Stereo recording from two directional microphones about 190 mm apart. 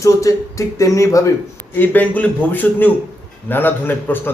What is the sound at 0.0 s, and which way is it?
A man's voice, 15° left (ahead or behind).